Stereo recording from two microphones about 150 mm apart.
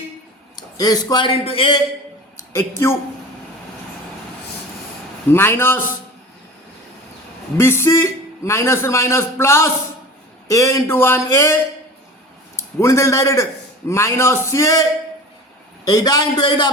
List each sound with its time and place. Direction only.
0.5 s a man's voice: 25° left (ahead or behind)
2.5 s speech: 20° left (ahead or behind)
5.3 s a man's voice: 15° left (ahead or behind)
7.5 s a man's voice: 15° left (ahead or behind)